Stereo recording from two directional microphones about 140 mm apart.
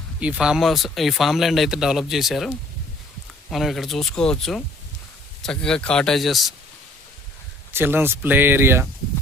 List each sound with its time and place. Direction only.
0.2 s speech: 5° right (ahead or behind)
3.5 s speech: centre (ahead or behind)
7.7 s speech: 15° right (ahead or behind)